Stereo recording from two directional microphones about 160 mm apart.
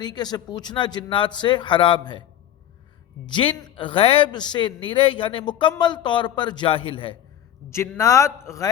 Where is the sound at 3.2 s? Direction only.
30° left (ahead or behind).